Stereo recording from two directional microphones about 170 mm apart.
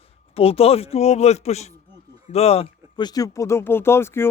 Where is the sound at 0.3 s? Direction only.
35° left (ahead or behind).